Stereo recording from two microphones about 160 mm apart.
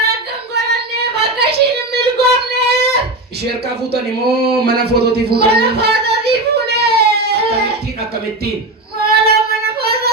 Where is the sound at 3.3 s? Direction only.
90° right.